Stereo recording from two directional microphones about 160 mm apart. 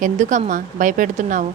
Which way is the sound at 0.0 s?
55° right (ahead or behind).